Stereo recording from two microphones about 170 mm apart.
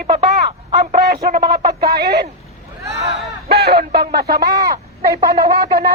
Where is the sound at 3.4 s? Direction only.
75° right (ahead or behind).